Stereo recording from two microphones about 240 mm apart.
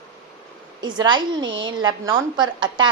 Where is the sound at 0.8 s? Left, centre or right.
Centre.